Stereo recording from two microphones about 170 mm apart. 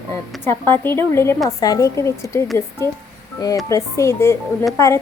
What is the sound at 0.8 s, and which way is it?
A woman's voice, 15° left (ahead or behind).